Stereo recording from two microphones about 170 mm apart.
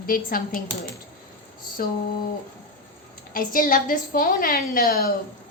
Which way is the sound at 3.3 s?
55° left (ahead or behind).